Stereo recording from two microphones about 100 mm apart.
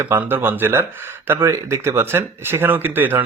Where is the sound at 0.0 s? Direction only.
20° right (ahead or behind).